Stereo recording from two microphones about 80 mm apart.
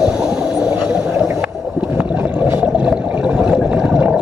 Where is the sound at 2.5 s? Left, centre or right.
Centre.